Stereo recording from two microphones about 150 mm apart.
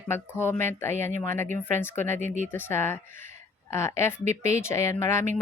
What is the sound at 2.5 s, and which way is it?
A woman's voice, 15° left (ahead or behind).